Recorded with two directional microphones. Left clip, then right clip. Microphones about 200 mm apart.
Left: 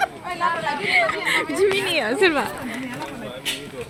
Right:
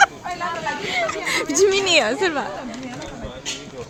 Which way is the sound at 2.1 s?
10° left (ahead or behind).